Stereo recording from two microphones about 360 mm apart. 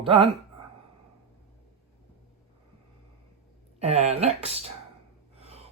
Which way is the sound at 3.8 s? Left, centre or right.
Centre.